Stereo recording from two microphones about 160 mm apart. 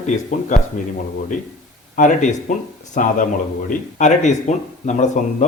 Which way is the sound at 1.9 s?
55° left (ahead or behind).